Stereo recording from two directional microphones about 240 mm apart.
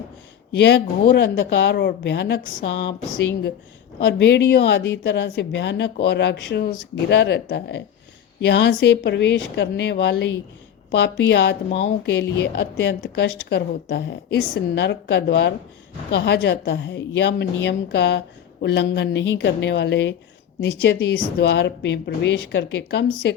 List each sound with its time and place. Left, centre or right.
0.5 s a woman's voice: left
4.0 s a woman's voice: left